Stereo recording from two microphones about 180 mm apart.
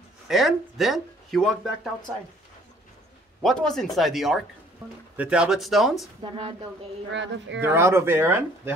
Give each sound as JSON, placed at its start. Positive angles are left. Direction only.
{"t": 0.3, "sound": "speech", "side_deg": 0}
{"t": 3.4, "sound": "speech", "side_deg": 5}
{"t": 6.3, "sound": "speech", "side_deg": -30}
{"t": 7.1, "sound": "speech", "side_deg": -80}
{"t": 7.6, "sound": "speech", "side_deg": -15}